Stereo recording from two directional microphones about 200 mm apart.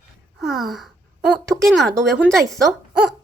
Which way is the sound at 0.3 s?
Centre (ahead or behind).